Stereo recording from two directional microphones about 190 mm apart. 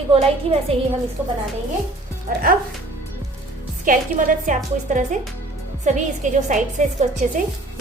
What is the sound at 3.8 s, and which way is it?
A woman's voice, 45° right (ahead or behind).